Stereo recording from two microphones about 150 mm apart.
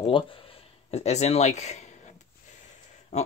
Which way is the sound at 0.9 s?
45° left (ahead or behind).